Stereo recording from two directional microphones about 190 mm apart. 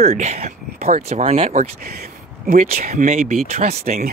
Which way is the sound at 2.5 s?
45° right (ahead or behind).